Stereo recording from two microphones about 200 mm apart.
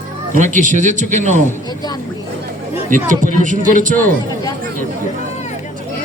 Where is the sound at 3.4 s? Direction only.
40° right (ahead or behind).